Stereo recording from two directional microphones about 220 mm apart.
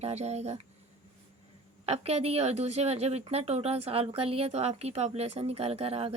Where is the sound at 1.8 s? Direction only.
30° right (ahead or behind).